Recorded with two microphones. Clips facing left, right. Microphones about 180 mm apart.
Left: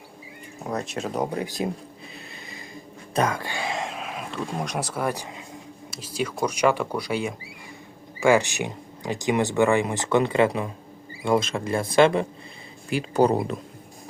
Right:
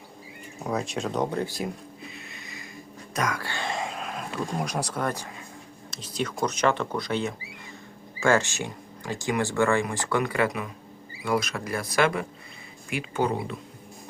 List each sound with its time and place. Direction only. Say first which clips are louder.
0.6 s speech: even; centre (ahead or behind); by 1.6 s 15° left (ahead or behind)
2.1 s a sound: left 2 dB; 30° left (ahead or behind)
3.2 s speech: left 5 dB; 30° left (ahead or behind)
3.4 s speech: left 2 dB; 10° left (ahead or behind); by 13.6 s 40° left (ahead or behind)